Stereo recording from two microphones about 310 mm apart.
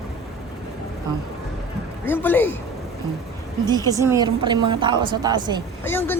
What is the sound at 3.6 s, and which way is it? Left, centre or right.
A woman's voice, centre.